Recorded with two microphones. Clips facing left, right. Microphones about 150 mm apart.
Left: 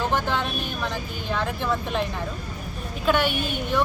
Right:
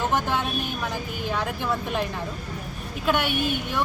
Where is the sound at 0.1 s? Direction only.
10° right (ahead or behind).